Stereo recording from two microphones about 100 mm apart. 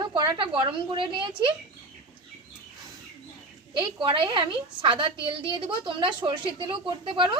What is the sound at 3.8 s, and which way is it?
A woman's voice, 50° right (ahead or behind).